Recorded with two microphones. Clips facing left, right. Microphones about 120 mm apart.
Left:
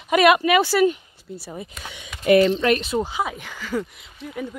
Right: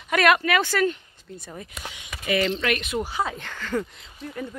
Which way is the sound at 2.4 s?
30° left (ahead or behind).